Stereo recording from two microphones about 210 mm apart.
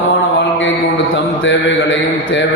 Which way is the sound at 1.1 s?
60° left (ahead or behind).